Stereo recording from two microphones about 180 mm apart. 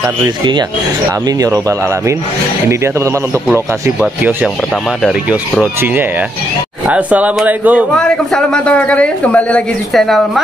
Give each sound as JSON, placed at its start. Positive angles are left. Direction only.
{"t": 1.2, "sound": "a man's voice", "side_deg": -20}
{"t": 7.9, "sound": "speech", "side_deg": 5}